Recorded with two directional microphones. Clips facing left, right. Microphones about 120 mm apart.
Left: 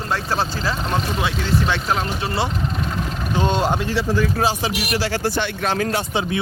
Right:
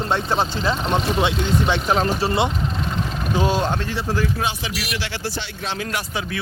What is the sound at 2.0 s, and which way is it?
Speech, 35° right (ahead or behind).